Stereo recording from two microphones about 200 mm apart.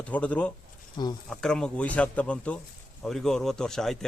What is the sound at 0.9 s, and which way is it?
Speech, 20° left (ahead or behind).